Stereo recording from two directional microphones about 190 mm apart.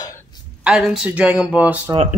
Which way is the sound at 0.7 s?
5° right (ahead or behind).